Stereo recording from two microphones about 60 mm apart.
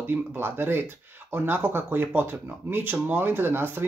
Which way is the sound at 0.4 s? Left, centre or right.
Right.